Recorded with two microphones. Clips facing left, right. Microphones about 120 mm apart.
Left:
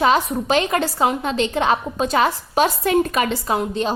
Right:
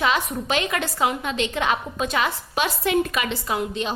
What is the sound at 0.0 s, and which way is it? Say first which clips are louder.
A woman's voice: left 6 dB; 35° left (ahead or behind).